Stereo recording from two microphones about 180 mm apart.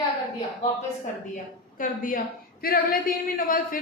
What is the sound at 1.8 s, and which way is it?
A woman's voice, 50° left (ahead or behind).